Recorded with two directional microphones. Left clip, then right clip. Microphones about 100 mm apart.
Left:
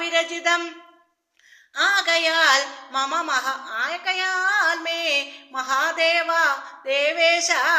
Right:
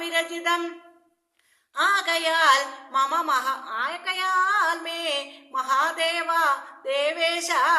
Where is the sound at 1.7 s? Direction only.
40° right (ahead or behind).